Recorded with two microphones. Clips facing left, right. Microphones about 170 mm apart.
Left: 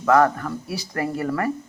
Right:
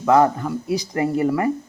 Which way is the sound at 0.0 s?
15° right (ahead or behind).